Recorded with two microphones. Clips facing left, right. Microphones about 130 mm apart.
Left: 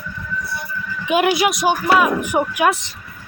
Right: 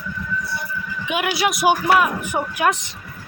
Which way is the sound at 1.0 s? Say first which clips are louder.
Left 7 dB; 35° left (ahead or behind).